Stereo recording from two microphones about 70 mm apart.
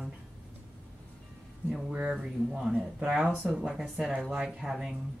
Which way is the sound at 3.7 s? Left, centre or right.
Centre.